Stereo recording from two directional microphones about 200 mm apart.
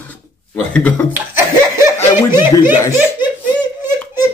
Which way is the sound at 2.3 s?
10° right (ahead or behind).